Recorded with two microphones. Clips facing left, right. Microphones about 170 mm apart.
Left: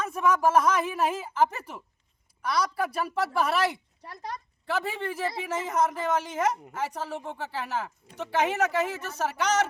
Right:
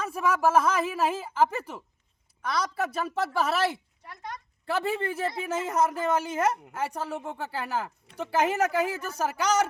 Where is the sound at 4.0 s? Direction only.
35° left (ahead or behind).